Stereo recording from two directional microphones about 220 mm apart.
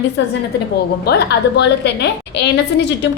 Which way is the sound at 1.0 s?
50° left (ahead or behind).